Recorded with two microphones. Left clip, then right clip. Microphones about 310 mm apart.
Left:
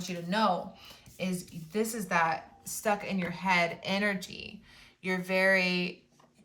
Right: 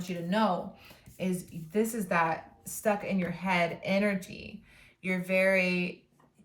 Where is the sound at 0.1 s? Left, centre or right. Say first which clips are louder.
Even; centre.